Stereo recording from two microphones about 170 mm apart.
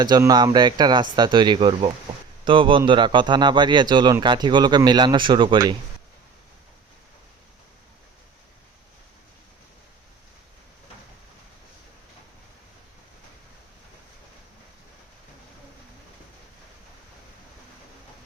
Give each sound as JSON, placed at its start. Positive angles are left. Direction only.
{"t": 0.0, "sound": "a man's voice", "side_deg": -25}